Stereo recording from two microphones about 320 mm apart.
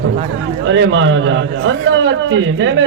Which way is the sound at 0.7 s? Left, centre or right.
Right.